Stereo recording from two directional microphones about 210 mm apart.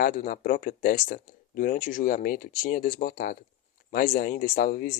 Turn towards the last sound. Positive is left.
turn(degrees=45)  # may be behind; listen again after turning